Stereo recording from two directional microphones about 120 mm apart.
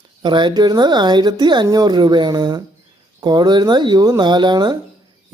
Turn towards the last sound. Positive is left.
turn(degrees=-40)  # may be behind; listen again after turning